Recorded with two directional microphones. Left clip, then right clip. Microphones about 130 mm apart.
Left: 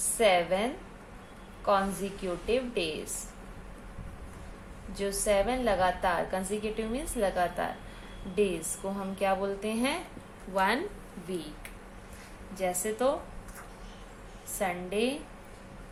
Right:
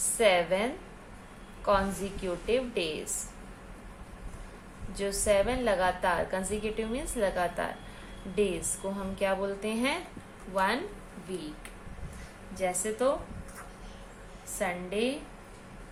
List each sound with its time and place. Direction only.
0.2 s a woman's voice: 10° left (ahead or behind)
4.9 s a woman's voice: 5° left (ahead or behind)
10.5 s speech: 30° left (ahead or behind)
12.5 s a woman's voice: 25° left (ahead or behind)
14.6 s a woman's voice: 20° left (ahead or behind)